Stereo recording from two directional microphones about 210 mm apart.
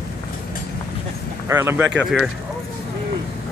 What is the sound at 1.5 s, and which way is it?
Speech, 10° right (ahead or behind).